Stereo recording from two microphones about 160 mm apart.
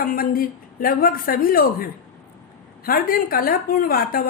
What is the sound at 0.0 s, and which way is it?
A woman's voice, 60° left (ahead or behind).